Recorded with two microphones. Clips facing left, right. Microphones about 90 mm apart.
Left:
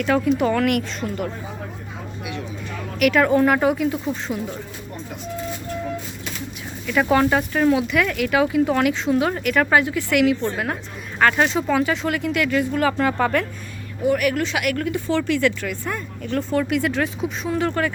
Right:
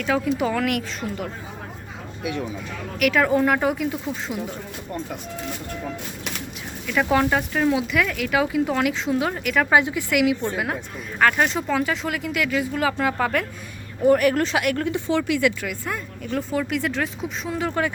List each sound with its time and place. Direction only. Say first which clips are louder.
0.0 s a woman's voice: left 3 dB; centre (ahead or behind)
3.0 s a woman's voice: left 3 dB; centre (ahead or behind)
6.8 s a woman's voice: left 2 dB; 5° left (ahead or behind)
9.7 s a woman's voice: right 1 dB; 15° right (ahead or behind); by 13.4 s centre (ahead or behind)
14.0 s a woman's voice: right 3 dB; 35° right (ahead or behind); by 17.7 s centre (ahead or behind)